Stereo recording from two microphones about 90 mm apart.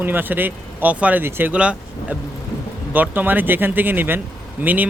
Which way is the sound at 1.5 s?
15° right (ahead or behind).